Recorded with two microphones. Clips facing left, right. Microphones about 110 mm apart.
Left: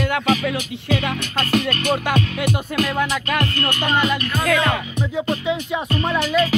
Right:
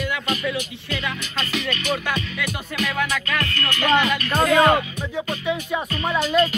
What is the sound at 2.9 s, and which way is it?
Music, 25° left (ahead or behind).